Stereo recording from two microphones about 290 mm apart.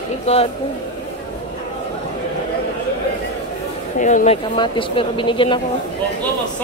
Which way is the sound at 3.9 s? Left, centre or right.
Left.